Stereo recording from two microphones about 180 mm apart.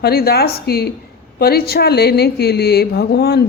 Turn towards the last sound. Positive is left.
turn(degrees=65)  # may be behind; listen again after turning